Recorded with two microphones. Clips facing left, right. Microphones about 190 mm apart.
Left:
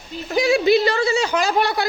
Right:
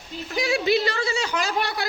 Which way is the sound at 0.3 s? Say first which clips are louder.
Left 7 dB; 25° left (ahead or behind).